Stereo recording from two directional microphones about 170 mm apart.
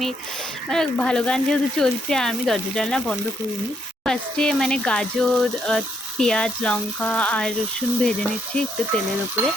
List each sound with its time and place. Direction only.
0.7 s speech: 5° left (ahead or behind)